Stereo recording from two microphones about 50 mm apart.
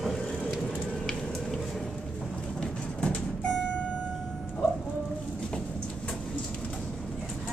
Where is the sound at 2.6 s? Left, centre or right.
Left.